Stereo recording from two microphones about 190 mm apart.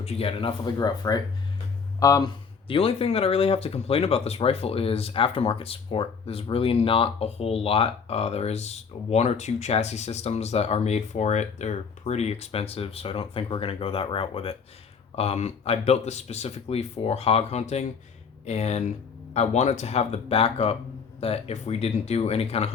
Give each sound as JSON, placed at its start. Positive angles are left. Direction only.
{"t": 0.0, "sound": "speech", "side_deg": 30}